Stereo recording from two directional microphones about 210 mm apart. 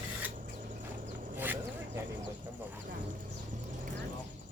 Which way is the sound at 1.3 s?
10° right (ahead or behind).